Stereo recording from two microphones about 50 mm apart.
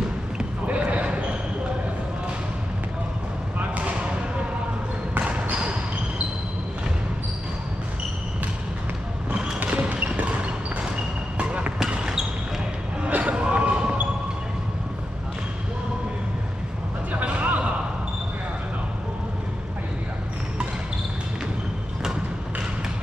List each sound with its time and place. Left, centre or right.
0.7 s basketball bounce: right
3.5 s basketball bounce: right
9.6 s a sound: right
11.3 s basketball bounce: right
11.8 s basketball bounce: centre
13.0 s basketball bounce: right
17.2 s a sound: right